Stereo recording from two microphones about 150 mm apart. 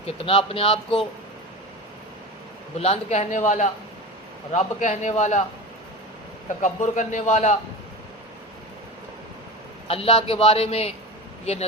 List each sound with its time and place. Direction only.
0.0 s a man's voice: 40° left (ahead or behind)
2.7 s speech: 45° left (ahead or behind)
6.6 s speech: 55° left (ahead or behind)
9.8 s a man's voice: 40° left (ahead or behind)